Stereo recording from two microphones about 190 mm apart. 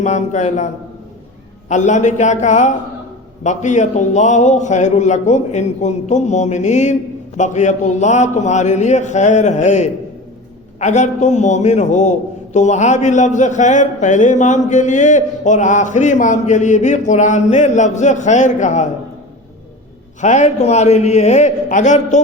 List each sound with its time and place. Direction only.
0.0 s a man's voice: 40° left (ahead or behind)
1.7 s a man's voice: 40° left (ahead or behind)
20.2 s a man's voice: 40° left (ahead or behind)